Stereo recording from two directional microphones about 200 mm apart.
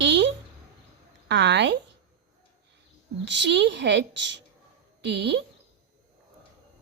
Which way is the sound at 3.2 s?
65° right (ahead or behind).